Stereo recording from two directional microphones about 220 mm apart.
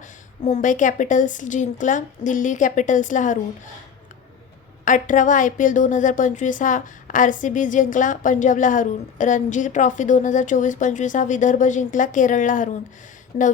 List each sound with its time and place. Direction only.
0.4 s a woman's voice: 35° left (ahead or behind)
4.9 s a woman's voice: 35° left (ahead or behind)